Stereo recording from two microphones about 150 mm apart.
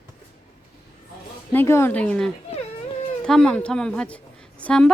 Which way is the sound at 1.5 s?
15° left (ahead or behind).